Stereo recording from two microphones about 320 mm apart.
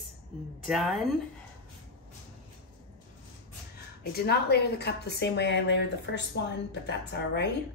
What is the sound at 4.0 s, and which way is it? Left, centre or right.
A woman's voice, left.